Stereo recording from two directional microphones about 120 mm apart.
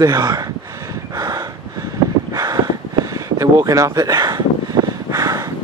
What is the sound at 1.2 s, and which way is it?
Gasp, 30° right (ahead or behind).